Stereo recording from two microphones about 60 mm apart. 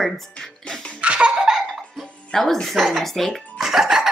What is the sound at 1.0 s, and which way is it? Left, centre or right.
Laughter, centre.